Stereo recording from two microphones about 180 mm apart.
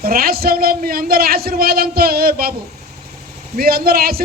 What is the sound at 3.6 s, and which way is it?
Speech, 55° right (ahead or behind).